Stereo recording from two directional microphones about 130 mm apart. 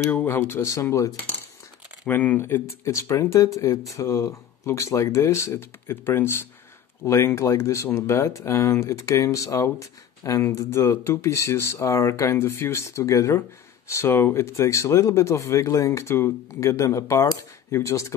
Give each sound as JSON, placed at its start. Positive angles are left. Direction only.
{"t": 0.1, "sound": "speech", "side_deg": 15}